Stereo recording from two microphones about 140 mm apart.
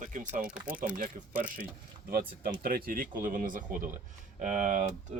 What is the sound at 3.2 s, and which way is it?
Speech, 75° right (ahead or behind).